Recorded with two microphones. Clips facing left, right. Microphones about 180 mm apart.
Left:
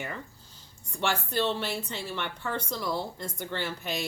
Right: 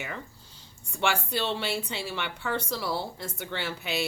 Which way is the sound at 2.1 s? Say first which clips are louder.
Right 2 dB; 90° right.